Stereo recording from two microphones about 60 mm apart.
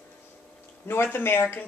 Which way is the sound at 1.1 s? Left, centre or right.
Left.